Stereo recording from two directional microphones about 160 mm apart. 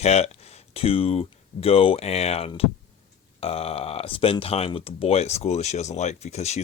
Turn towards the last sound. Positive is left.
turn(degrees=45)  # may be behind; listen again after turning